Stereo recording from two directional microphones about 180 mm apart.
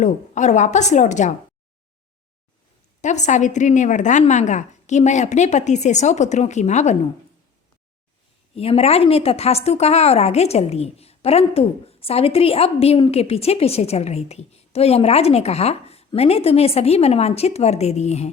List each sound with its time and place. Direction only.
0.0 s a woman's voice: 40° left (ahead or behind)
3.0 s a woman's voice: 40° left (ahead or behind)
8.5 s a woman's voice: 35° left (ahead or behind)